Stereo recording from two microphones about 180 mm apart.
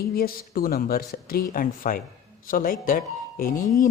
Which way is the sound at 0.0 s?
60° left (ahead or behind).